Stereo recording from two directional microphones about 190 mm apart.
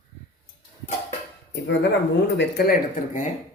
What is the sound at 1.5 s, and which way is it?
Speech, 65° left (ahead or behind).